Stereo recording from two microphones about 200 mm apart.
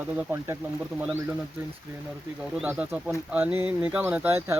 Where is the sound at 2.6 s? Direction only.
5° right (ahead or behind).